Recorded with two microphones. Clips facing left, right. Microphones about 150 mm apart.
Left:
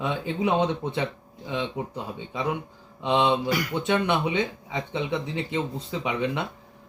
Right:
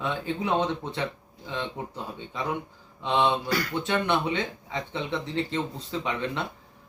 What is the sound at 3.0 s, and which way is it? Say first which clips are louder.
Speech: left 2 dB; 15° left (ahead or behind).